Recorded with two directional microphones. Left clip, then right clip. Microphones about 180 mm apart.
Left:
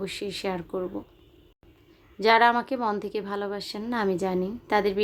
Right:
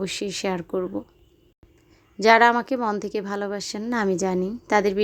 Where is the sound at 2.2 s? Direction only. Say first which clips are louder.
Right 4 dB; 35° right (ahead or behind).